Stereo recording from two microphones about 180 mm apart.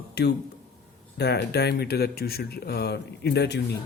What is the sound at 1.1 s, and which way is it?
Speech, 65° left (ahead or behind).